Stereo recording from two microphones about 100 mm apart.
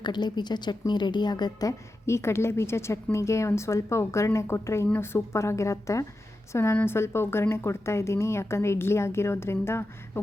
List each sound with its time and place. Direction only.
0.0 s a woman's voice: 45° left (ahead or behind); by 9.8 s 25° left (ahead or behind)